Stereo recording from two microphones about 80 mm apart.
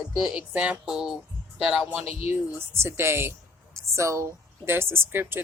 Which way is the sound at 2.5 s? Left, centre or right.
Right.